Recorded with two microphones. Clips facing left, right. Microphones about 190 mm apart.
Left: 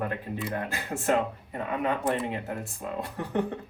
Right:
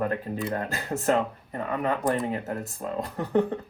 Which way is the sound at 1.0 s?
40° right (ahead or behind).